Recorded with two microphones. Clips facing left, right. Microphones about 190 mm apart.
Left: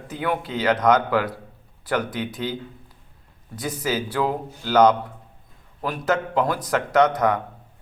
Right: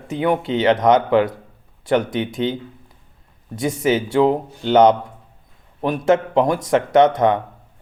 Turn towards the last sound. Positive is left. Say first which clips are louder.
# right 5 dB
turn(degrees=-25)  # may be behind; listen again after turning